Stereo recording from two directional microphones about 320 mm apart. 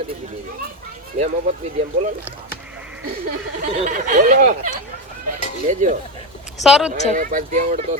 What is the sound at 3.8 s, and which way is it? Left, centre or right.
Speech, right.